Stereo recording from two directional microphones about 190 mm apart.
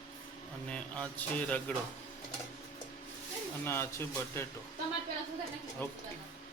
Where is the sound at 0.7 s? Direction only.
5° left (ahead or behind).